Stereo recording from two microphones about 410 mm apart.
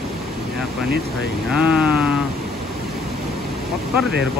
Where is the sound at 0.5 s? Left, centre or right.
Right.